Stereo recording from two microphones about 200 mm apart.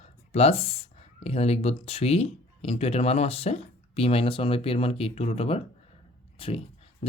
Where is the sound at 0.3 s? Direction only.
30° left (ahead or behind).